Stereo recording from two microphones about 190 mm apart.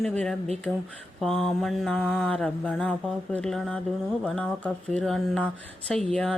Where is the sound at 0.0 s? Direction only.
5° left (ahead or behind).